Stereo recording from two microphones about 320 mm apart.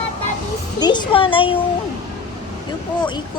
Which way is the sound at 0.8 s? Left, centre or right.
Centre.